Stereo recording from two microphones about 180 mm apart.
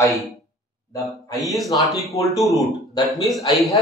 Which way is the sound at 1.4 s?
Centre (ahead or behind).